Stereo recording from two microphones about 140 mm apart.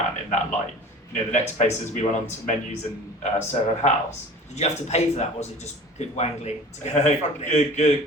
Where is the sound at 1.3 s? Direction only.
55° left (ahead or behind).